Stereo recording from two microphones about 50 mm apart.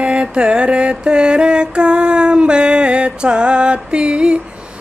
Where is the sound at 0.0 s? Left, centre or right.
Right.